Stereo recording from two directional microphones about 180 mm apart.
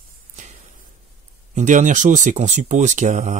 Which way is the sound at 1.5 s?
45° right (ahead or behind).